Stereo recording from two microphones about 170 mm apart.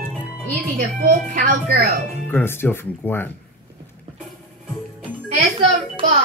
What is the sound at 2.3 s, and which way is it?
Speech, 15° left (ahead or behind).